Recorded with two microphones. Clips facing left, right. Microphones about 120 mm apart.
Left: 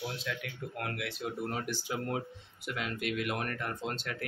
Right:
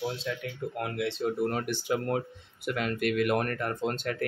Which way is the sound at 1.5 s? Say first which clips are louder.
Right 6 dB; 60° right (ahead or behind).